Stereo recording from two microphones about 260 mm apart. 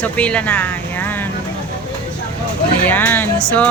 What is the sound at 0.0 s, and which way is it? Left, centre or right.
Speech, centre.